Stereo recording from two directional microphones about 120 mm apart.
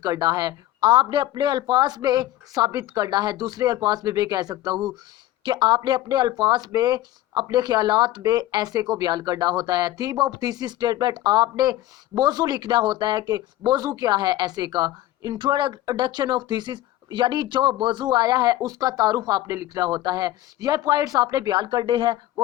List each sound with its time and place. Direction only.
0.0 s speech: 35° right (ahead or behind)